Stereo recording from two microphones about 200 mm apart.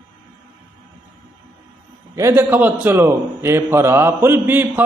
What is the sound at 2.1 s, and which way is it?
A man's voice, 10° right (ahead or behind).